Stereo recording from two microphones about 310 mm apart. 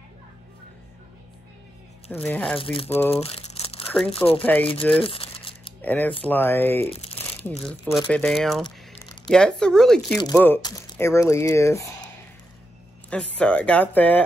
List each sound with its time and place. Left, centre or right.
2.1 s speech: centre
2.6 s speech: centre
3.1 s crumpling: centre
3.8 s crumpling: centre
4.1 s speech: centre
4.4 s speech: centre
4.9 s a sound: centre
5.8 s speech: centre
6.9 s speech: centre
7.4 s speech: centre
8.6 s a sound: centre
9.3 s speech: centre
13.1 s speech: centre